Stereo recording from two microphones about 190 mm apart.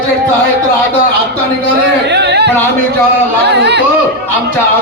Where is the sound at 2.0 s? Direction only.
65° right (ahead or behind).